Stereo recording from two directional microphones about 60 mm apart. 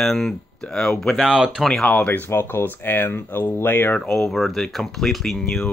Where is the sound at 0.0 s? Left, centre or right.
Centre.